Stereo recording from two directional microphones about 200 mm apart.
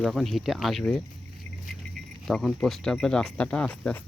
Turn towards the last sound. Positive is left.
turn(degrees=5)  # may be behind; listen again after turning